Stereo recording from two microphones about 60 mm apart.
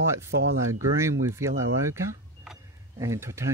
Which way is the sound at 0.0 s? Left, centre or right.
Right.